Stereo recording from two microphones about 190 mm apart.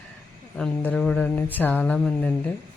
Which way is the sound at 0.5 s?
5° left (ahead or behind).